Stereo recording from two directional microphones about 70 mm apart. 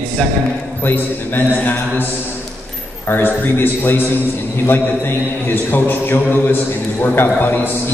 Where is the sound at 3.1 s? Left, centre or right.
Left.